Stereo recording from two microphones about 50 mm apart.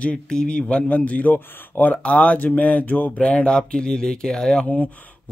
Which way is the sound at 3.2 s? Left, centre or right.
Left.